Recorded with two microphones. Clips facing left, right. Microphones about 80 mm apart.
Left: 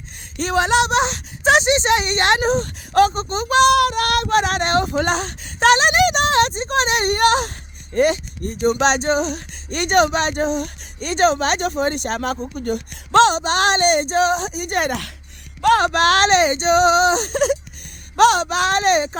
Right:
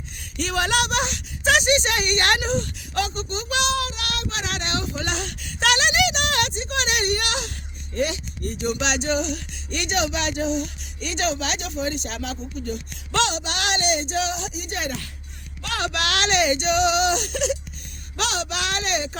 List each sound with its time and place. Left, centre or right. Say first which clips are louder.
0.3 s speech: left 6 dB; left
2.4 s speech: left 6 dB; left
3.7 s speech: left 11 dB; left
13.1 s speech: left 10 dB; left
15.6 s speech: left 12 dB; left